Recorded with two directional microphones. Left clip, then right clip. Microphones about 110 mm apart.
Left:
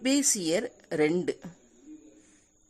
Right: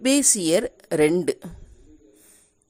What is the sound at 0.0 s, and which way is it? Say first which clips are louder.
A woman's voice: right 6 dB; 30° right (ahead or behind).